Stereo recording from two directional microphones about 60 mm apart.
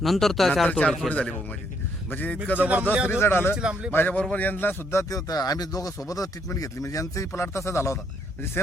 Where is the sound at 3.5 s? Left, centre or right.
Centre.